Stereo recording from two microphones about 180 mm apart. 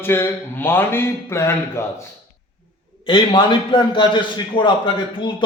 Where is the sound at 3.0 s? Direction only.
25° left (ahead or behind).